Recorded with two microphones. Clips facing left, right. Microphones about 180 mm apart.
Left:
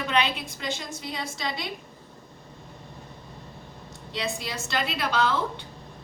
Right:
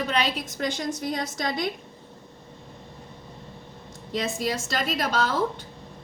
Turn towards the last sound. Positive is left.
turn(degrees=-40)  # may be behind; listen again after turning